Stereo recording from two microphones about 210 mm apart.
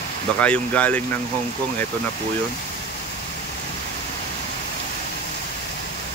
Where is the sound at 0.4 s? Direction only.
5° left (ahead or behind).